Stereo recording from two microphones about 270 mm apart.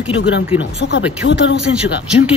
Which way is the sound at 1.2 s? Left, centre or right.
Left.